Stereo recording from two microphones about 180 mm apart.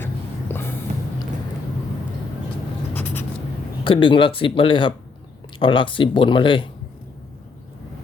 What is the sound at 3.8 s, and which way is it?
Speech, 25° left (ahead or behind).